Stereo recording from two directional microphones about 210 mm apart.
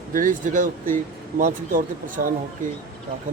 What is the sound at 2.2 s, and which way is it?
Speech, 45° right (ahead or behind).